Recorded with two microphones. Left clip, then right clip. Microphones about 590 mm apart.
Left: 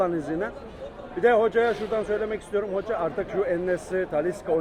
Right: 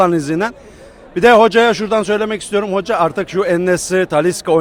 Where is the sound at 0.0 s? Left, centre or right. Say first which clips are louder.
Right 12 dB; right.